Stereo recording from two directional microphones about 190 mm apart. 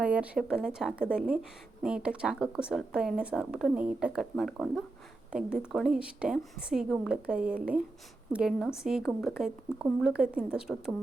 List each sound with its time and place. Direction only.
0.0 s speech: 5° right (ahead or behind)